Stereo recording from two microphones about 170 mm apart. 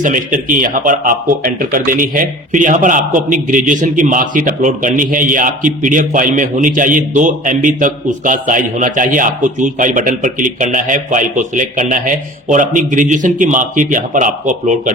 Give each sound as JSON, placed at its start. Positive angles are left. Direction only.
{"t": 0.0, "sound": "speech", "side_deg": -50}